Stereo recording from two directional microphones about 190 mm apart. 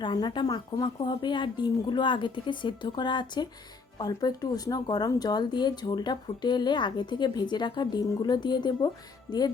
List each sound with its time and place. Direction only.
0.0 s speech: 25° left (ahead or behind)